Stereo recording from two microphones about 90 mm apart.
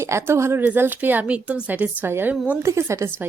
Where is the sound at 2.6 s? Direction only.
35° right (ahead or behind).